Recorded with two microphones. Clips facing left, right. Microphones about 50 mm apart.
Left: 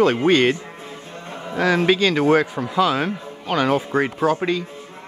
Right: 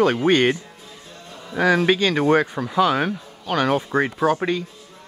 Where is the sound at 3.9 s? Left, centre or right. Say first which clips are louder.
Right 1 dB; left.